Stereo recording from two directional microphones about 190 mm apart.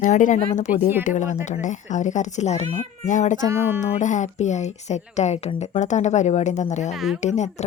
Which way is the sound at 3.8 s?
40° left (ahead or behind).